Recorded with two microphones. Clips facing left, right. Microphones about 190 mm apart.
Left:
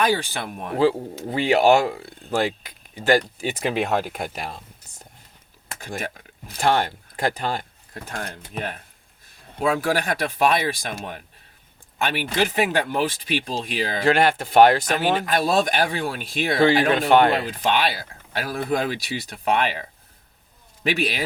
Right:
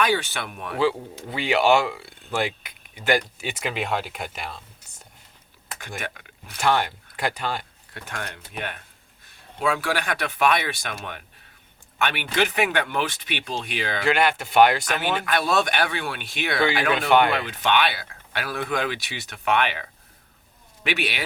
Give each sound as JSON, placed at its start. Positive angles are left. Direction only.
{"t": 0.0, "sound": "speech", "side_deg": 35}
{"t": 5.8, "sound": "speech", "side_deg": 35}